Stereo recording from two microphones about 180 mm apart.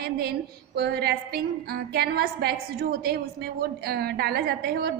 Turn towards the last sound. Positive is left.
turn(degrees=-60)  # may be behind; listen again after turning